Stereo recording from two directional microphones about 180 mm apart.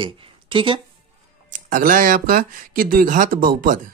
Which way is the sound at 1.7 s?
45° right (ahead or behind).